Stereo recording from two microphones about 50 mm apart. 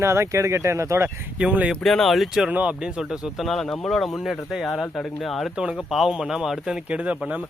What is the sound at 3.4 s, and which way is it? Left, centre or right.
Speech, centre.